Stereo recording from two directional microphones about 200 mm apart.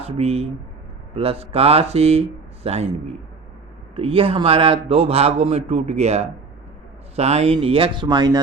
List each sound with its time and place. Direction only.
0.0 s a man's voice: 30° right (ahead or behind)
3.9 s speech: 25° right (ahead or behind)